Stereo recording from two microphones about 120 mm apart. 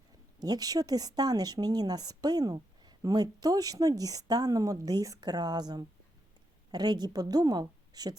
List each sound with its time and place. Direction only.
0.4 s a woman's voice: 30° right (ahead or behind)